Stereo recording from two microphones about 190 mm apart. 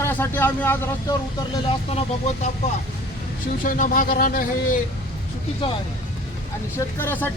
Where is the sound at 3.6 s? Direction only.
45° left (ahead or behind).